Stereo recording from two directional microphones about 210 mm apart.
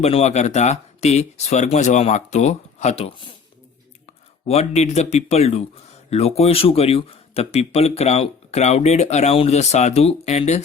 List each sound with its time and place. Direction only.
0.0 s speech: 30° left (ahead or behind)
4.4 s speech: 30° left (ahead or behind)